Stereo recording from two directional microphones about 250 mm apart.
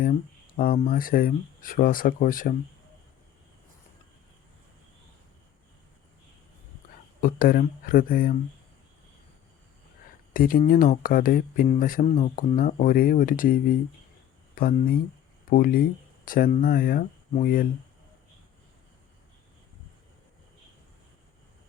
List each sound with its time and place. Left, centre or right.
0.0 s speech: left
7.2 s speech: left
10.3 s speech: left